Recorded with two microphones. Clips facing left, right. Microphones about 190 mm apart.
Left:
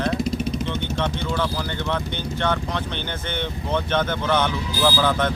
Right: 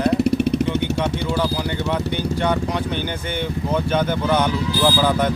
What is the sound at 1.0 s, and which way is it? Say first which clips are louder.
Speech: right 3 dB; 10° right (ahead or behind).